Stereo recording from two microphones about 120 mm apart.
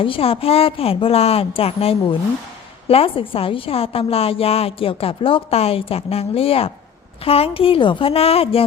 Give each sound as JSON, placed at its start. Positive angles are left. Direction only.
{"t": 0.0, "sound": "a woman's voice", "side_deg": 50}